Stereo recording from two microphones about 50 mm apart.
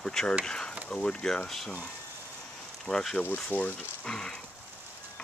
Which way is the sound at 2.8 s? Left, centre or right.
Centre.